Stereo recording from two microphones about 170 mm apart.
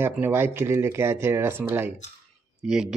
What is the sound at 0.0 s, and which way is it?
Speech, 10° right (ahead or behind).